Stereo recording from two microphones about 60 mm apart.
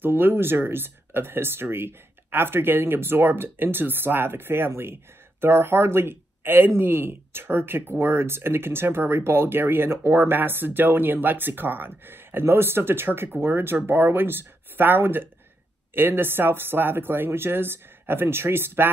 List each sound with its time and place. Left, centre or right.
0.0 s speech: right